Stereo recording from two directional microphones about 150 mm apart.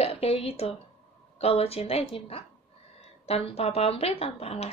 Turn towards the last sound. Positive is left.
turn(degrees=45)  # may be behind; listen again after turning